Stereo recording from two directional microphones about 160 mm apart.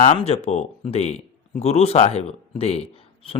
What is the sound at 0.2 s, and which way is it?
A man's voice, 40° left (ahead or behind).